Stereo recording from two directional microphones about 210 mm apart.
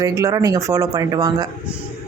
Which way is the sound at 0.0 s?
15° right (ahead or behind).